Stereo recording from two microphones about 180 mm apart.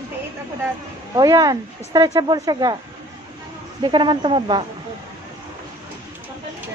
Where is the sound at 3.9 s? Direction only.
25° right (ahead or behind).